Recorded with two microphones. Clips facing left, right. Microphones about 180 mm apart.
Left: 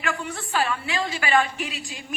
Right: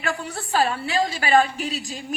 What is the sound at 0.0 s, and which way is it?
A woman's voice, 35° right (ahead or behind).